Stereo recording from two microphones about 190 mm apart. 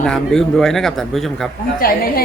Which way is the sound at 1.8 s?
50° left (ahead or behind).